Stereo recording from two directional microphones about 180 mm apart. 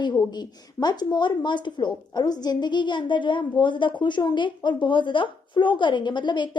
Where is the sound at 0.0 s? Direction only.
20° left (ahead or behind).